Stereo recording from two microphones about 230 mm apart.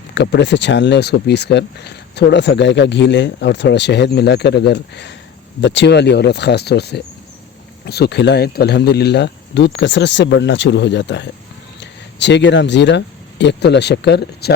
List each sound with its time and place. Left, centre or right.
0.1 s speech: left